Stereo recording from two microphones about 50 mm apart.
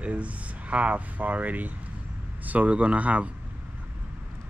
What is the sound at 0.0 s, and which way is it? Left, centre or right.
Speech, right.